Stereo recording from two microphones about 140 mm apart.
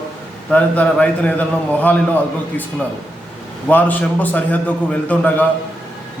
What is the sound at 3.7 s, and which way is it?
A man's voice, 10° left (ahead or behind).